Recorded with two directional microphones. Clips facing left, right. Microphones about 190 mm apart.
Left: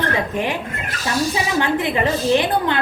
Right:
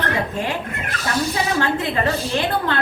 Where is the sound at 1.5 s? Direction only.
20° left (ahead or behind).